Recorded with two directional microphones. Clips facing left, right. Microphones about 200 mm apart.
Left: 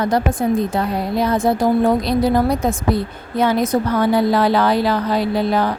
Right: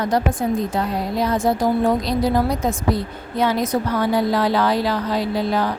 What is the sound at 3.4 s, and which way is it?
A woman's voice, 55° left (ahead or behind).